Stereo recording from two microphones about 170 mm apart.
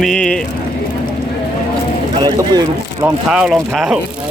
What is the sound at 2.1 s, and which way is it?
Speech, 25° right (ahead or behind).